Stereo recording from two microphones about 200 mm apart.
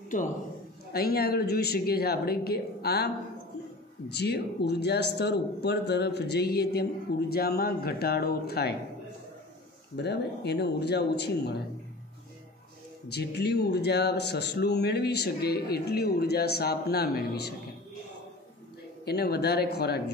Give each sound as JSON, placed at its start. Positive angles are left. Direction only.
{"t": 0.1, "sound": "a man's voice", "side_deg": 40}
{"t": 4.1, "sound": "speech", "side_deg": 55}
{"t": 9.9, "sound": "speech", "side_deg": 55}
{"t": 13.1, "sound": "speech", "side_deg": 55}
{"t": 19.0, "sound": "speech", "side_deg": 50}